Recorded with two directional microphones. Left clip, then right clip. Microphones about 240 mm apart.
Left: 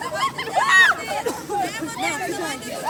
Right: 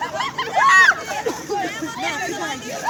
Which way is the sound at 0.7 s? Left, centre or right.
Centre.